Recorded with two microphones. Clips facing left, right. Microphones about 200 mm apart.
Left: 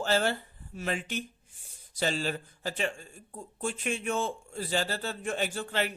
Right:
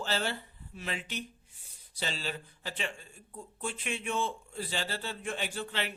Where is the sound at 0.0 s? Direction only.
50° left (ahead or behind).